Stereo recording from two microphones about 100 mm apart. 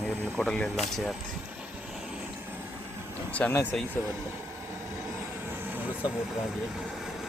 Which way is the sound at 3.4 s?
15° left (ahead or behind).